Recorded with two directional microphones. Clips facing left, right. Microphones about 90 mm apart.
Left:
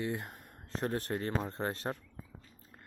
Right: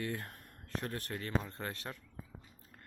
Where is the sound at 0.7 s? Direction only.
30° left (ahead or behind).